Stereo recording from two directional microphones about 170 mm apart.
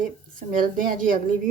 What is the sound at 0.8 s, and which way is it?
Speech, 55° right (ahead or behind).